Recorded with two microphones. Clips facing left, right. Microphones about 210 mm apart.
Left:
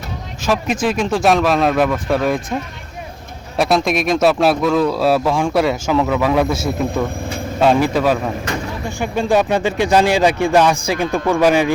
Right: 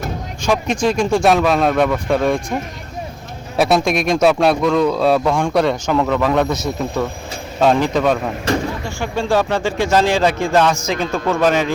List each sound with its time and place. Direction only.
0.4 s speech: 5° left (ahead or behind)
3.6 s speech: centre (ahead or behind)
7.6 s speech: 5° left (ahead or behind)
9.0 s speech: 15° left (ahead or behind)